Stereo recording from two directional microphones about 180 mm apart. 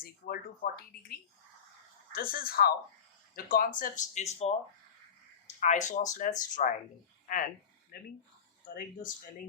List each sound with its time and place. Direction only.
0.0 s speech: 55° left (ahead or behind)
2.1 s speech: 55° left (ahead or behind); by 4.5 s 35° left (ahead or behind)
5.5 s speech: 40° left (ahead or behind)
7.3 s a sound: 50° left (ahead or behind)